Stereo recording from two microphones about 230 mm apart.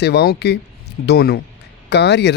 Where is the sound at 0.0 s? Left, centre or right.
Left.